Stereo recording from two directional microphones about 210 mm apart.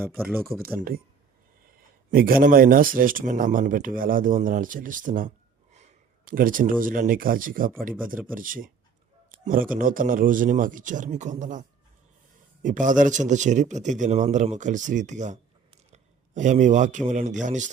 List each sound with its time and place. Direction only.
0.2 s speech: 5° right (ahead or behind)
0.8 s speech: 45° right (ahead or behind)
2.0 s speech: 45° right (ahead or behind)
9.3 s a sound: 40° right (ahead or behind)
9.7 s speech: 40° right (ahead or behind)
12.6 s speech: 40° right (ahead or behind)